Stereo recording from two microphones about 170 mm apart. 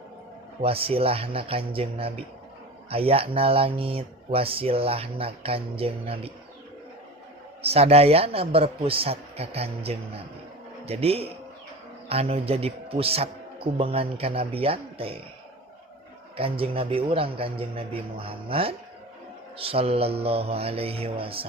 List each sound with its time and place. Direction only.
0.6 s speech: 35° right (ahead or behind)
7.6 s speech: 35° right (ahead or behind)
16.4 s speech: 35° right (ahead or behind)